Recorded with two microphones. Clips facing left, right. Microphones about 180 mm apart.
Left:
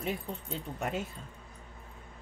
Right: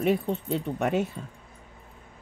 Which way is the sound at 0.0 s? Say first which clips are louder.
Right 11 dB; 75° right (ahead or behind).